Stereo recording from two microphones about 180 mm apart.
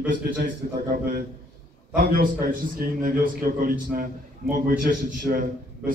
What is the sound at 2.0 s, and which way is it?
A man's voice, 55° right (ahead or behind).